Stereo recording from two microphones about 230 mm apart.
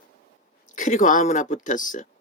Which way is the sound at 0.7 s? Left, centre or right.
Left.